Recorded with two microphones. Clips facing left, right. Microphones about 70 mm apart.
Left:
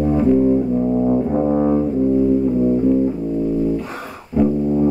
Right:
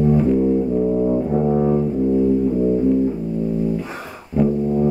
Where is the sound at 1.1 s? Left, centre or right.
Left.